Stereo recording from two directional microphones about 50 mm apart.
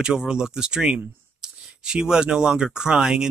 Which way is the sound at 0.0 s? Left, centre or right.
Centre.